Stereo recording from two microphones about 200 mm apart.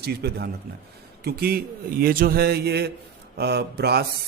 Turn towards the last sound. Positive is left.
turn(degrees=-55)  # may be behind; listen again after turning